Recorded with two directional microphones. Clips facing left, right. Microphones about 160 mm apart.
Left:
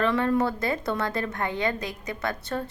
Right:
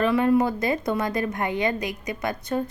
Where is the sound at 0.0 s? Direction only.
15° right (ahead or behind).